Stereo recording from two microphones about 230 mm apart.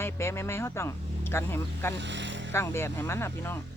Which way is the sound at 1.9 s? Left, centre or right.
Right.